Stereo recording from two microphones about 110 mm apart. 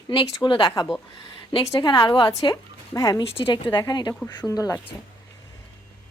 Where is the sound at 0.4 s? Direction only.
50° left (ahead or behind).